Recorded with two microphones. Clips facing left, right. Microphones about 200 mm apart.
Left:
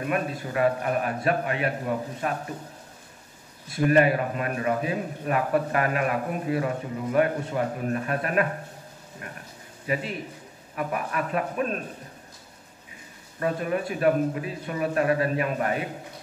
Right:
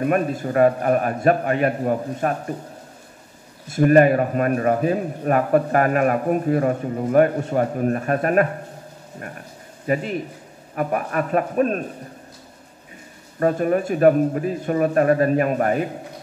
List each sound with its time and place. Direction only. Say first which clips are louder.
0.0 s a man's voice: right 7 dB; 45° right (ahead or behind)
3.7 s a man's voice: right 6 dB; 45° right (ahead or behind)
9.9 s a man's voice: right 6 dB; 45° right (ahead or behind)
13.4 s a man's voice: right 7 dB; 45° right (ahead or behind)